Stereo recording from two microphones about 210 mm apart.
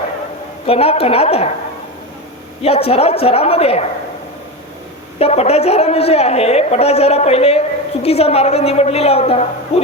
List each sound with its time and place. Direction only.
0.7 s a woman's voice: 25° left (ahead or behind)
2.6 s a woman's voice: 30° left (ahead or behind)
5.2 s a woman's voice: 30° left (ahead or behind)